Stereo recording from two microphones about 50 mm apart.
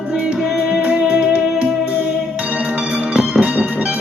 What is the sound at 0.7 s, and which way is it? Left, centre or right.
Music, centre.